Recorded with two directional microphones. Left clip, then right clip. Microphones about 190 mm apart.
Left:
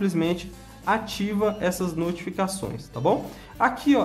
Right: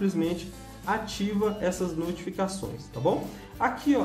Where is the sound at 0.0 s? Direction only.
20° left (ahead or behind).